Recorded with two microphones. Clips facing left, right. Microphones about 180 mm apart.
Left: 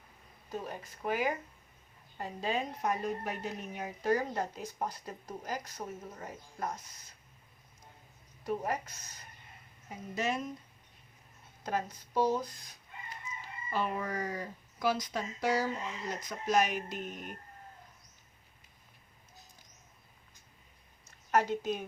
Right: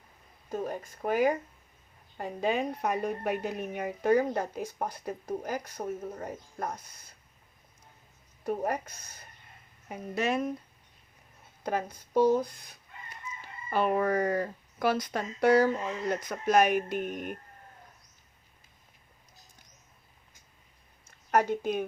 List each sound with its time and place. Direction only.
0.5 s a woman's voice: 45° right (ahead or behind)
8.4 s a woman's voice: 55° right (ahead or behind)
11.6 s a woman's voice: 55° right (ahead or behind)
21.2 s a woman's voice: 50° right (ahead or behind)